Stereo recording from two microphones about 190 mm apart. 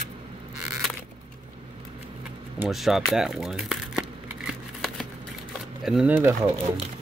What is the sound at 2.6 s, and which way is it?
Crumpling, centre (ahead or behind).